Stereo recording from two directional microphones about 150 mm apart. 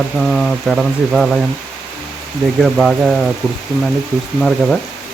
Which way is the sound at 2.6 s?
Centre (ahead or behind).